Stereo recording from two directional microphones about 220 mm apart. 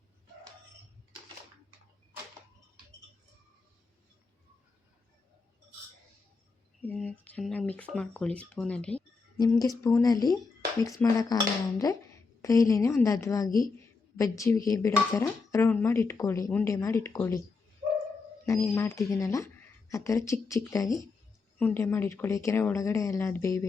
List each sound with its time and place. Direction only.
6.8 s speech: 5° left (ahead or behind)
9.4 s speech: 15° left (ahead or behind)
12.4 s a woman's voice: 15° left (ahead or behind)
18.4 s speech: 10° left (ahead or behind)